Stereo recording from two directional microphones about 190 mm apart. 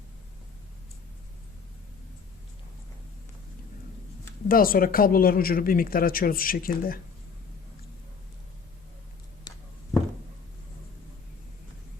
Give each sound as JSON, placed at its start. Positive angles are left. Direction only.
{"t": 4.4, "sound": "speech", "side_deg": 50}